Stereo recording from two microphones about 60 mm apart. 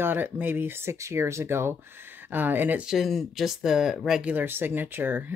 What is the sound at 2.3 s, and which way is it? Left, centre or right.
Speech, right.